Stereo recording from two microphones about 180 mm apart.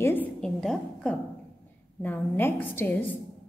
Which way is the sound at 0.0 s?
10° left (ahead or behind).